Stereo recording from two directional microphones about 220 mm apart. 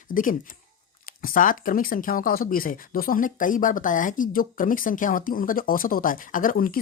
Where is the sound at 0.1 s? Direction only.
40° left (ahead or behind).